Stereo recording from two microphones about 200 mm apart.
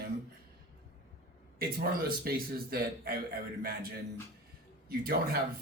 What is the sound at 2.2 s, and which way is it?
Speech, 50° right (ahead or behind).